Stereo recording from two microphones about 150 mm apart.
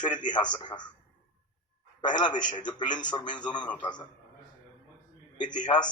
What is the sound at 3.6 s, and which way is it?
Speech, 10° left (ahead or behind).